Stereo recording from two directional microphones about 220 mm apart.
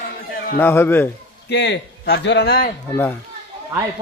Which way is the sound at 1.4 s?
50° left (ahead or behind).